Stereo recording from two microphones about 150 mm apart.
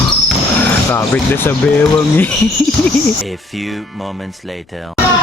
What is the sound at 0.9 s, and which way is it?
Speech, 15° left (ahead or behind).